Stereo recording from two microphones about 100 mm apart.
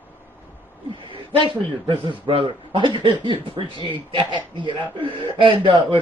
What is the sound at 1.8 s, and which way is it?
A man's voice, 60° right (ahead or behind).